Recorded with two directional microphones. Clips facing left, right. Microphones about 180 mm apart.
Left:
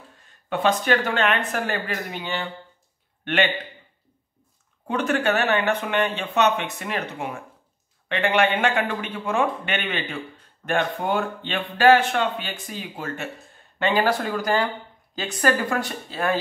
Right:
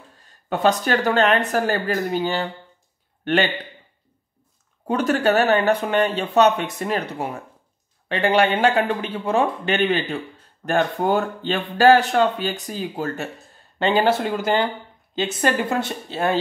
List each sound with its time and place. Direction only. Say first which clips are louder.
0.2 s speech: right 3 dB; 40° right (ahead or behind)
4.8 s speech: right 3 dB; 40° right (ahead or behind)
13.7 s a woman's voice: right 3 dB; 25° right (ahead or behind)